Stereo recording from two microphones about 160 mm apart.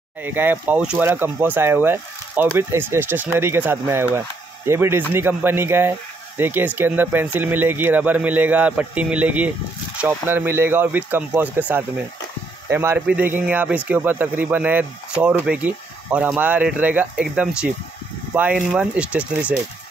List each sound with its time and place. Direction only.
0.2 s speech: 10° right (ahead or behind)